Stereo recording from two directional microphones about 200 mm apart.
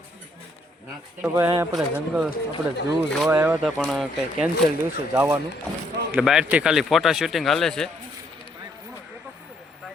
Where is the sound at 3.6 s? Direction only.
5° left (ahead or behind).